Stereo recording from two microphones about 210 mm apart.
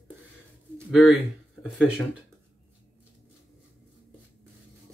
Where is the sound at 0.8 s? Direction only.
Centre (ahead or behind).